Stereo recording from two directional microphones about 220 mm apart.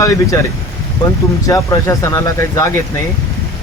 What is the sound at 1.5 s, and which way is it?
Speech, 15° left (ahead or behind).